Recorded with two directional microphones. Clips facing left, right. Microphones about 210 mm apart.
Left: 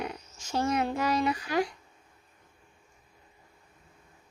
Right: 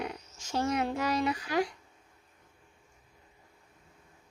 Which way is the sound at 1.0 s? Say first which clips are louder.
Left 2 dB; 50° left (ahead or behind).